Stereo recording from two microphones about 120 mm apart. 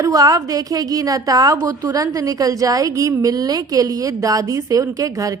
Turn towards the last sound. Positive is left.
turn(degrees=-30)  # may be behind; listen again after turning